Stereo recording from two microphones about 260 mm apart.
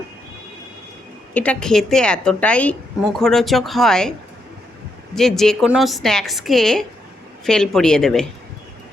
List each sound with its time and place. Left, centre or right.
1.3 s a woman's voice: centre
5.1 s a woman's voice: centre